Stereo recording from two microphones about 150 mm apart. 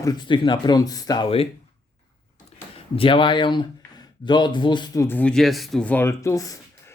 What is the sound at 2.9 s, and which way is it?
Speech, 35° left (ahead or behind).